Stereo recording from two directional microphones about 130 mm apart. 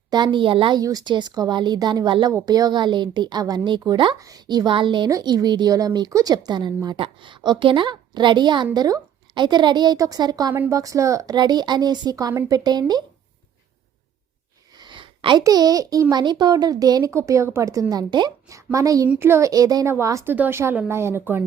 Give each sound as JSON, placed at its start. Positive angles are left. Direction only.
{"t": 0.1, "sound": "a woman's voice", "side_deg": -35}
{"t": 0.8, "sound": "a woman's voice", "side_deg": -30}
{"t": 10.5, "sound": "a child's voice", "side_deg": -20}
{"t": 14.8, "sound": "a sound", "side_deg": -40}
{"t": 15.4, "sound": "a child's voice", "side_deg": -30}
{"t": 19.0, "sound": "a child's voice", "side_deg": -15}